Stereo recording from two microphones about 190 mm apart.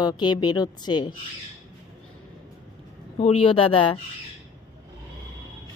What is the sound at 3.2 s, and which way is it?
Speech, 30° left (ahead or behind).